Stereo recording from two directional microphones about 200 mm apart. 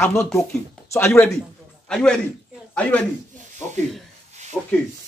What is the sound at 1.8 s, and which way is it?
A man's voice, 5° left (ahead or behind).